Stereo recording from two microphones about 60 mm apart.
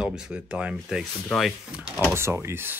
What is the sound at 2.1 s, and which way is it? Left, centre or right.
Speech, right.